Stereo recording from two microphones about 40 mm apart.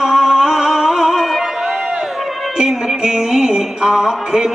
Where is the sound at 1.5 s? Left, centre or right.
Centre.